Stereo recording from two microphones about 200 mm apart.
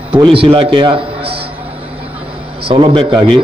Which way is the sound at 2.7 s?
25° right (ahead or behind).